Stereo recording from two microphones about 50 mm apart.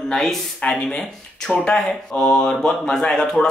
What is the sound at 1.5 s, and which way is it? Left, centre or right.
Speech, centre.